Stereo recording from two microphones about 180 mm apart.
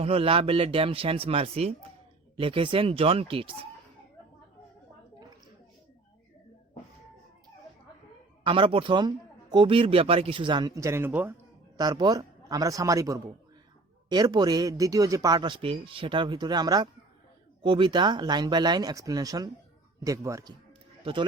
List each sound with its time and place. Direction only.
0.0 s speech: 30° right (ahead or behind)
8.4 s a man's voice: 30° right (ahead or behind); by 11.3 s 10° right (ahead or behind)
11.8 s a man's voice: 20° right (ahead or behind)